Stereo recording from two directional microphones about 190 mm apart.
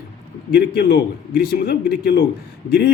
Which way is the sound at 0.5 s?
60° left (ahead or behind).